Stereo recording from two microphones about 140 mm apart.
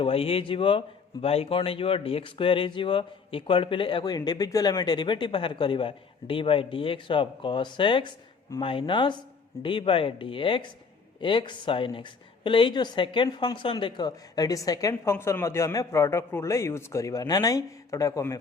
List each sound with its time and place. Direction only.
0.0 s a man's voice: 40° left (ahead or behind); by 18.3 s 25° left (ahead or behind)